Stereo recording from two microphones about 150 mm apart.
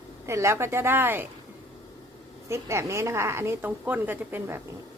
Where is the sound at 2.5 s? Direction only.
20° right (ahead or behind).